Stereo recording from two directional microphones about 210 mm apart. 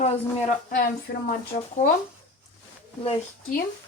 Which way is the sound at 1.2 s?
45° left (ahead or behind).